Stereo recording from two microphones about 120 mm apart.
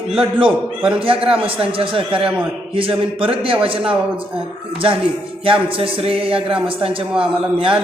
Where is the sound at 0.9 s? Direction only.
50° right (ahead or behind).